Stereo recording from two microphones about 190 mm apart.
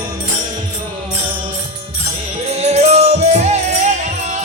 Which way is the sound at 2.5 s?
35° right (ahead or behind).